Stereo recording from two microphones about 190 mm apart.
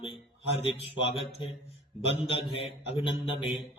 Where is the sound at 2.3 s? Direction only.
30° left (ahead or behind).